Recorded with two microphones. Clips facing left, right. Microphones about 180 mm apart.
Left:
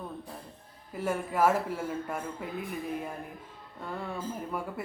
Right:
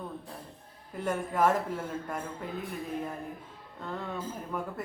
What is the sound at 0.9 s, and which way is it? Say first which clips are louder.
Speech: even; 10° left (ahead or behind).